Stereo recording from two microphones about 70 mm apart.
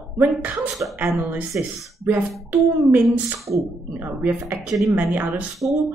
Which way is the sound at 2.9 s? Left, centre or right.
Right.